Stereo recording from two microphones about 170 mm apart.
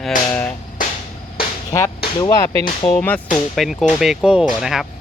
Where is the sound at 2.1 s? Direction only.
25° left (ahead or behind).